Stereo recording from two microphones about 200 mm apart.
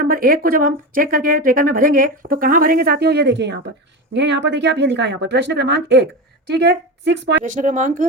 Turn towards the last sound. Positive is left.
turn(degrees=-40)  # may be behind; listen again after turning